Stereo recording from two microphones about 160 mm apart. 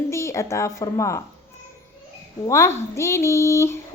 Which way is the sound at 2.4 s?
20° left (ahead or behind).